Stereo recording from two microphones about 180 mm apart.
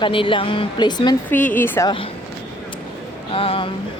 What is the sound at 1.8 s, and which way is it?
Speech, 30° left (ahead or behind).